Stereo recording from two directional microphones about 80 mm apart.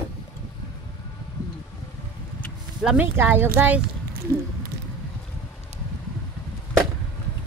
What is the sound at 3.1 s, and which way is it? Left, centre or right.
Speech, right.